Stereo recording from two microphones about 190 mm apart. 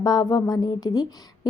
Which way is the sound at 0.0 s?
20° left (ahead or behind).